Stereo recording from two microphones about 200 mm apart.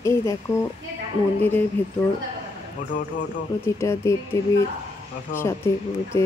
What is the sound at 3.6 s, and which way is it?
Speech, 15° left (ahead or behind).